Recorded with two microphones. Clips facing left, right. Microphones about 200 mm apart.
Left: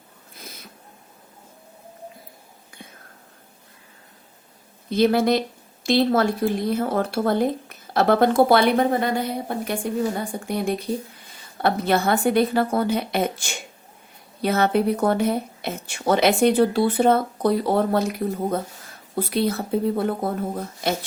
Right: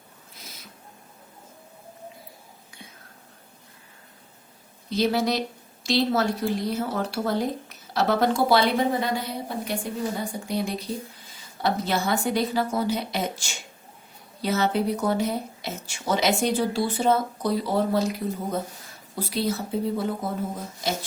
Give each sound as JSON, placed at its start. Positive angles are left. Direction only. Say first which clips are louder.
{"t": 4.9, "sound": "speech", "louder": "left 5 dB", "side_deg": 55}